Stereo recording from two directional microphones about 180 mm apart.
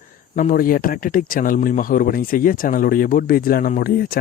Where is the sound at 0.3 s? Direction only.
50° left (ahead or behind).